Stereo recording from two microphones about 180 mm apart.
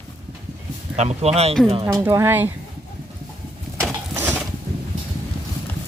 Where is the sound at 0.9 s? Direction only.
35° right (ahead or behind).